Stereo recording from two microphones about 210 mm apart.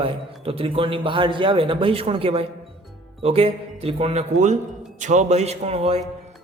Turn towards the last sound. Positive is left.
turn(degrees=-30)  # may be behind; listen again after turning